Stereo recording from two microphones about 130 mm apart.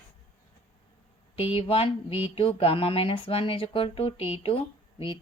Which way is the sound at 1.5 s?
45° left (ahead or behind).